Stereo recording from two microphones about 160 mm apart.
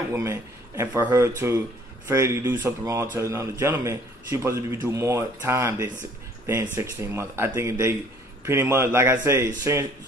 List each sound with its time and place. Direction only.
0.1 s a man's voice: 15° right (ahead or behind)